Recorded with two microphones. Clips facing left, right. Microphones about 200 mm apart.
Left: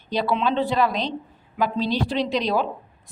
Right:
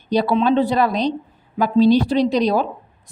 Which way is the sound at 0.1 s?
40° right (ahead or behind).